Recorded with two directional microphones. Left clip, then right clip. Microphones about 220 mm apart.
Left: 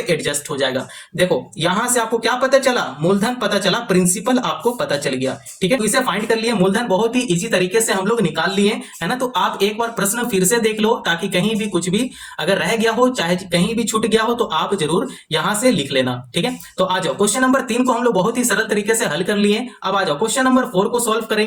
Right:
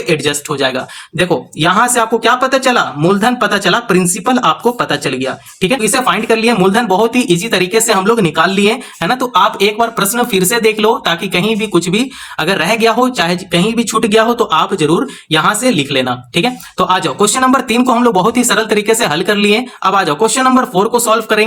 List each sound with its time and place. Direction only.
1.2 s speech: 40° right (ahead or behind)